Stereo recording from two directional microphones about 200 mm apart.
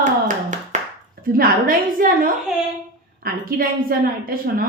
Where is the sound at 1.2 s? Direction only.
45° right (ahead or behind).